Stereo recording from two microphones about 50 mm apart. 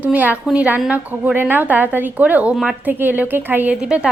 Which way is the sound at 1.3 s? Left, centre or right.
Right.